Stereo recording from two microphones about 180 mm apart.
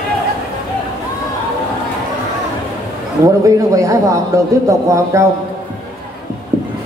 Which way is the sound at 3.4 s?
20° right (ahead or behind).